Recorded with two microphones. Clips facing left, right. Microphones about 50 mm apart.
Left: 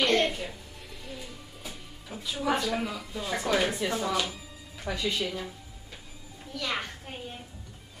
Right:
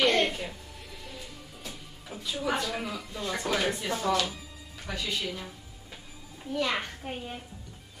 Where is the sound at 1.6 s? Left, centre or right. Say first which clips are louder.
Even; centre.